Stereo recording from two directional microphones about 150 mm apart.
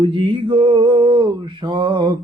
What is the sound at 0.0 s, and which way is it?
Mantra, 35° right (ahead or behind).